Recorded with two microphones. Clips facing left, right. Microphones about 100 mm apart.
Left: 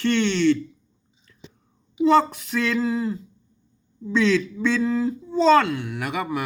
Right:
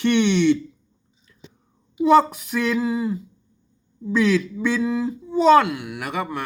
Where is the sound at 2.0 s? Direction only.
10° right (ahead or behind).